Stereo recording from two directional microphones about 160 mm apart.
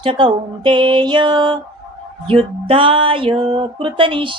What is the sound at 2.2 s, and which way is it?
Music, 35° right (ahead or behind).